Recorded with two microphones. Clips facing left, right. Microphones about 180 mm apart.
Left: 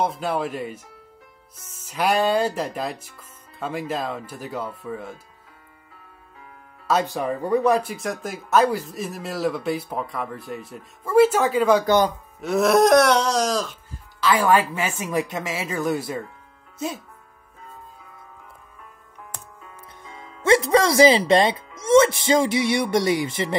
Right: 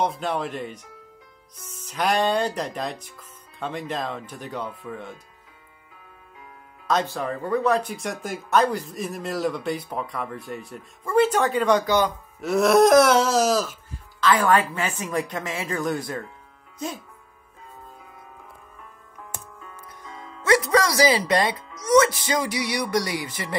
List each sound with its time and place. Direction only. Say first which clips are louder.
0.0 s speech: left 1 dB; 5° left (ahead or behind)
6.9 s speech: left 2 dB; 10° left (ahead or behind)
11.8 s a man's voice: left 3 dB; 50° left (ahead or behind)
12.4 s speech: even; centre (ahead or behind)
14.2 s a woman's voice: left 1 dB; 10° left (ahead or behind)
20.0 s speech: left 2 dB; 25° left (ahead or behind)